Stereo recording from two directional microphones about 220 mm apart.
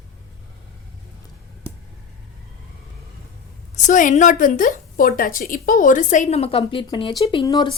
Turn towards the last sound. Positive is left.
turn(degrees=20)  # may be behind; listen again after turning